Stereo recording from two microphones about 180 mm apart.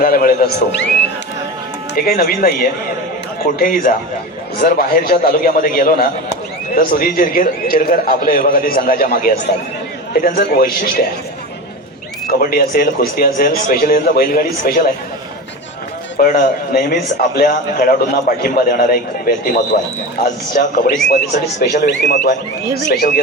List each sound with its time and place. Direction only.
0.0 s a man's voice: 55° left (ahead or behind)
2.0 s a man's voice: 55° left (ahead or behind)
12.3 s a man's voice: 55° left (ahead or behind)
16.1 s a man's voice: 50° left (ahead or behind)
22.9 s a man's voice: 60° left (ahead or behind)